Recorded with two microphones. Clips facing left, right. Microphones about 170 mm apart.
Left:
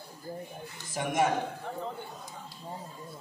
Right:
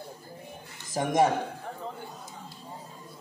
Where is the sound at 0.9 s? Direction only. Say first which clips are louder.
Right 4 dB; 40° right (ahead or behind).